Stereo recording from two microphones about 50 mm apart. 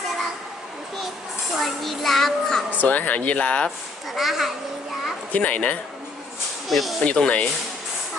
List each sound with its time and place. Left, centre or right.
1.5 s a child's voice: centre
2.8 s speech: left
4.1 s a child's voice: centre
5.3 s speech: left
6.7 s a child's voice: centre
7.0 s speech: left